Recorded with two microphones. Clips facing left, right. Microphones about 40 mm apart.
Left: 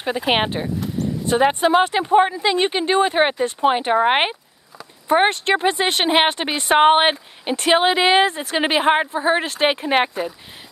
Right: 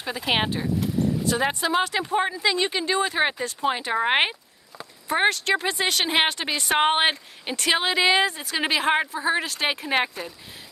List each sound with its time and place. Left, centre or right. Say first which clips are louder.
0.0 s speech: left 5 dB; left
4.0 s speech: left 4 dB; centre
5.0 s speech: left 5 dB; left